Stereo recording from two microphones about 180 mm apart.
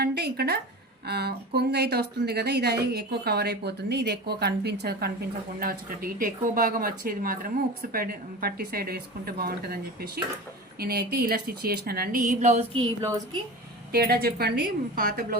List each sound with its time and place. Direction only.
0.0 s a sound: 65° right (ahead or behind)
1.0 s a woman's voice: 65° right (ahead or behind); by 12.6 s 40° right (ahead or behind)
13.0 s a woman's voice: 20° right (ahead or behind)
13.9 s a woman's voice: 60° right (ahead or behind)